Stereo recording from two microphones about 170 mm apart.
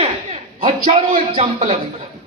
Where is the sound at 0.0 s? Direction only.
35° right (ahead or behind).